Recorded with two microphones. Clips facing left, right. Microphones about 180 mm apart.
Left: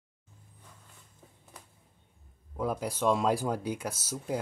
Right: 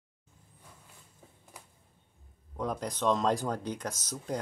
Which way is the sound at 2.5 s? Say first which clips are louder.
Left 2 dB; 5° left (ahead or behind).